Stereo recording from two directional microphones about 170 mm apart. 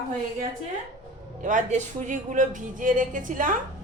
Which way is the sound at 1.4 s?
45° right (ahead or behind).